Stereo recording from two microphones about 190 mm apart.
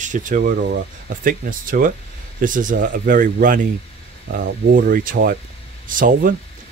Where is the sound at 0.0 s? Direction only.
40° right (ahead or behind).